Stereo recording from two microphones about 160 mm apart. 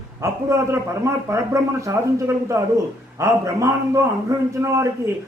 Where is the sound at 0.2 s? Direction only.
20° right (ahead or behind).